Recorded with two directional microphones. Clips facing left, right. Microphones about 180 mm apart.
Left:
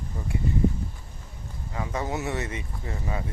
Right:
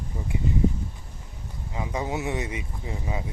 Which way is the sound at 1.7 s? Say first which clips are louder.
Right 1 dB; 10° right (ahead or behind).